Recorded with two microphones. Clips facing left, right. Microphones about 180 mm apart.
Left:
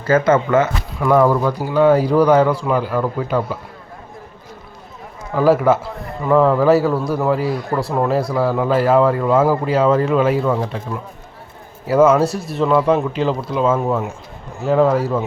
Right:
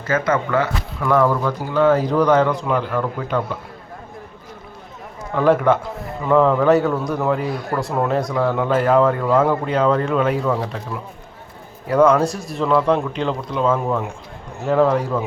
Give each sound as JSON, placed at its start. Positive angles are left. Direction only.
{"t": 0.0, "sound": "speech", "side_deg": 30}
{"t": 0.5, "sound": "speech", "side_deg": 15}
{"t": 5.3, "sound": "a man's voice", "side_deg": 5}
{"t": 11.9, "sound": "a man's voice", "side_deg": 5}